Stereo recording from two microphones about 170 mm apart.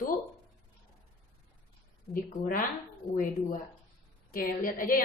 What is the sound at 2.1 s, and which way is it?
Speech, 55° left (ahead or behind).